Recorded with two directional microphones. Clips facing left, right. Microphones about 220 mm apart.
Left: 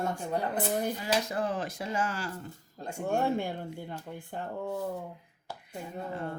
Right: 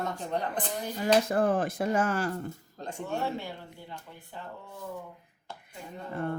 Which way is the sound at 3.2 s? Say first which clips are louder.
Left 4 dB; 50° left (ahead or behind).